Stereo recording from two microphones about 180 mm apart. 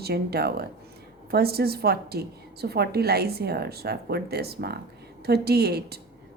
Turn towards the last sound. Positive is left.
turn(degrees=-60)  # may be behind; listen again after turning